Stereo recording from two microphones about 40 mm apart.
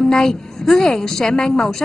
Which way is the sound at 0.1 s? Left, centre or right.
Centre.